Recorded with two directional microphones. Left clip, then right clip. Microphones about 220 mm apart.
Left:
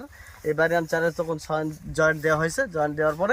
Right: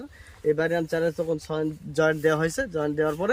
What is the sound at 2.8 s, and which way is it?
Speech, 10° right (ahead or behind).